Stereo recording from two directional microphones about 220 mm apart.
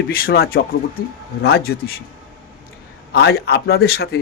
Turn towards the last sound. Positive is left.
turn(degrees=45)  # may be behind; listen again after turning